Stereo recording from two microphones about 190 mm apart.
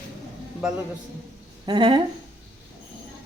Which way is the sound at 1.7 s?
20° right (ahead or behind).